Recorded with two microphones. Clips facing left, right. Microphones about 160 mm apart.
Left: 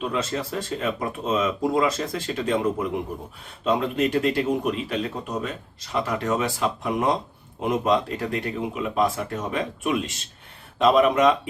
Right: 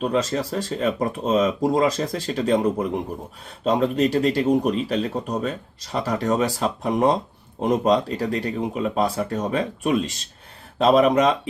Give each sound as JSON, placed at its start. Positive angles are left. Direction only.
{"t": 0.0, "sound": "speech", "side_deg": -35}